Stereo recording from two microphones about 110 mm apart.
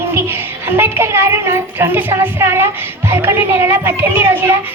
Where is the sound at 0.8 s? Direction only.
25° right (ahead or behind).